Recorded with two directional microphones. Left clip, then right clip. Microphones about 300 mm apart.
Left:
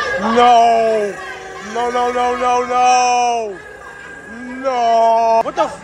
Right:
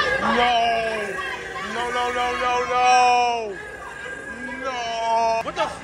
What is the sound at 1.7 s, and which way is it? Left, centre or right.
Speech, centre.